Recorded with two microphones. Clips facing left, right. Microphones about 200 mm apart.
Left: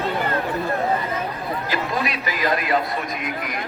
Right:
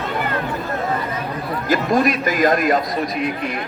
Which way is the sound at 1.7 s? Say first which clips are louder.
Right 10 dB; 45° right (ahead or behind).